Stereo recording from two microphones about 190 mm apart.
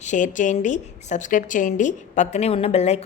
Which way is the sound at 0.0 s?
40° left (ahead or behind).